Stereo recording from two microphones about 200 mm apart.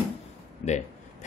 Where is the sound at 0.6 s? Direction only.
35° left (ahead or behind).